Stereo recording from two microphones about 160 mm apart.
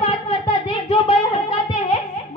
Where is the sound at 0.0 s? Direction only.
30° left (ahead or behind).